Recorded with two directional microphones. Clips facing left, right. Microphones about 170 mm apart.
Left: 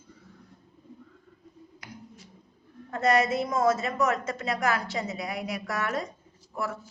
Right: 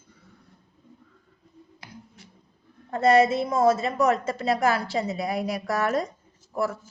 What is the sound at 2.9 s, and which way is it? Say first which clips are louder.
A woman's voice: right 5 dB; 30° right (ahead or behind).